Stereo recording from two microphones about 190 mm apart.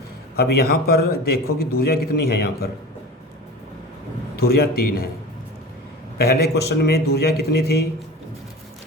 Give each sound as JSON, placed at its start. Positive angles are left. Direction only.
{"t": 0.3, "sound": "a man's voice", "side_deg": 55}
{"t": 4.4, "sound": "a man's voice", "side_deg": 55}
{"t": 6.1, "sound": "a man's voice", "side_deg": 55}